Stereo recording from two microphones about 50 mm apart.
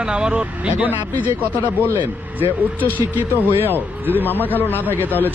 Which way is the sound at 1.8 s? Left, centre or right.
Right.